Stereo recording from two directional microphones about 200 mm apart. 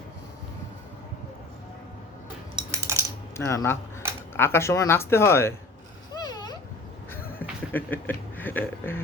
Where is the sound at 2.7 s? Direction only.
15° right (ahead or behind).